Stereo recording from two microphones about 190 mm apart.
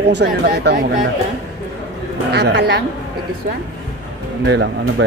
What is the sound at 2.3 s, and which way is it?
Speech, 60° right (ahead or behind).